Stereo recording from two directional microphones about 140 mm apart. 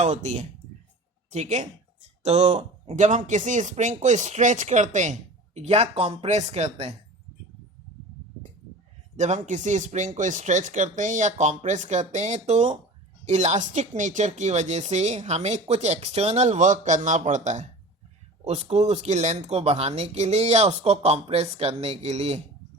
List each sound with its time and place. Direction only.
0.0 s speech: 55° right (ahead or behind)
5.5 s speech: 50° right (ahead or behind)
9.1 s speech: 60° right (ahead or behind)